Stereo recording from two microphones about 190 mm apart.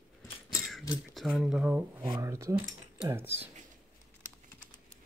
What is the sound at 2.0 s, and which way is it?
Speech, 20° right (ahead or behind).